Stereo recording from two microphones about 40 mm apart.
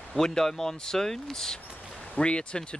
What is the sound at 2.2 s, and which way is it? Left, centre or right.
Speech, left.